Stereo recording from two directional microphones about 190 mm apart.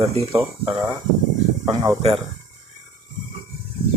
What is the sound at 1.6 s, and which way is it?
Speech, 20° right (ahead or behind).